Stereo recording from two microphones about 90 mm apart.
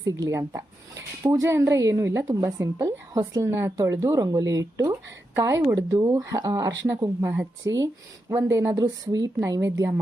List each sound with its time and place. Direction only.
0.0 s speech: 40° right (ahead or behind)
4.9 s speech: 30° right (ahead or behind)